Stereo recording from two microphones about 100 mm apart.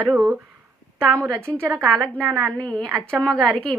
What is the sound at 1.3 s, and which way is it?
A woman's voice, 10° left (ahead or behind).